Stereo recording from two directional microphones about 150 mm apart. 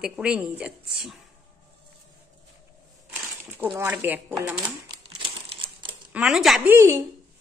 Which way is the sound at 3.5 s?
10° right (ahead or behind).